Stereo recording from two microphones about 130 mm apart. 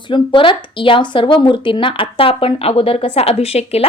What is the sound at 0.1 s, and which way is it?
Speech, 40° left (ahead or behind).